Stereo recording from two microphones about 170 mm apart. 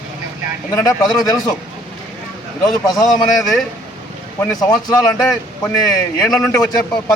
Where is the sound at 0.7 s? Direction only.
20° left (ahead or behind).